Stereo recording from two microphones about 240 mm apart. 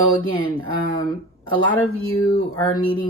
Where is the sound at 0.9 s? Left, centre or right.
Centre.